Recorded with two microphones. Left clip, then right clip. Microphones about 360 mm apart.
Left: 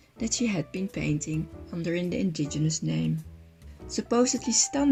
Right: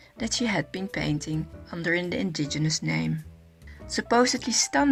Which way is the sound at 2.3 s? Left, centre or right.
Right.